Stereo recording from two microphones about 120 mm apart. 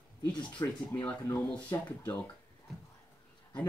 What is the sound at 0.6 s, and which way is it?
Speech, 25° left (ahead or behind).